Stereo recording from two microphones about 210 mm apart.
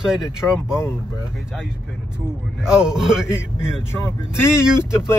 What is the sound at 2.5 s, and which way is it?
Speech, 5° right (ahead or behind).